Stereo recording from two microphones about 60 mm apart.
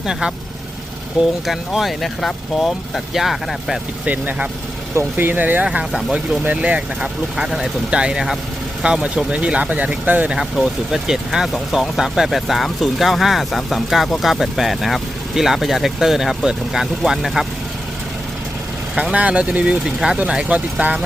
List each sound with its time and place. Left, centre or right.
0.0 s speech: centre
1.5 s speech: centre
4.0 s speech: right
5.9 s speech: centre
6.4 s speech: right
7.3 s speech: centre
10.3 s speech: centre
19.1 s speech: right
19.8 s speech: centre
20.1 s speech: centre